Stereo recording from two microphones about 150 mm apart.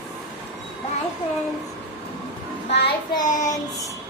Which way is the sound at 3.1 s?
25° left (ahead or behind).